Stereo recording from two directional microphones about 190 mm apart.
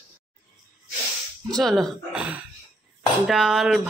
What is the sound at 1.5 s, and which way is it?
Speech, centre (ahead or behind).